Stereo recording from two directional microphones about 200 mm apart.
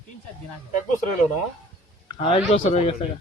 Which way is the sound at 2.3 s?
35° left (ahead or behind).